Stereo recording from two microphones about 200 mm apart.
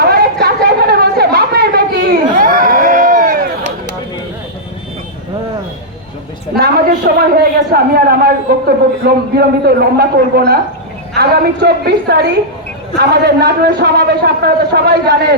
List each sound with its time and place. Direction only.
0.1 s chatter: 55° right (ahead or behind)
6.6 s a man's voice: 50° right (ahead or behind)